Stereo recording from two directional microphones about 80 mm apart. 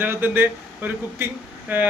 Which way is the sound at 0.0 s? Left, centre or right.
Right.